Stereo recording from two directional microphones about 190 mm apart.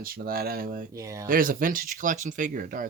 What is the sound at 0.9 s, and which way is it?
Speech, 15° right (ahead or behind).